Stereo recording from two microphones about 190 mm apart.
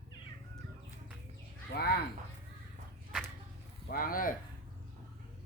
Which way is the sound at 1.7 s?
55° left (ahead or behind).